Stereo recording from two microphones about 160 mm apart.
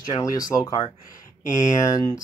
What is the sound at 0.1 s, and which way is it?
Speech, 20° left (ahead or behind).